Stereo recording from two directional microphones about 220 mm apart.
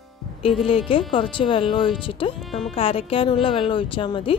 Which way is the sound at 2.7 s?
25° left (ahead or behind).